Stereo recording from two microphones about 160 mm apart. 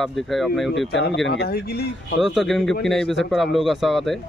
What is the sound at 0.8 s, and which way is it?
Speech, 90° left.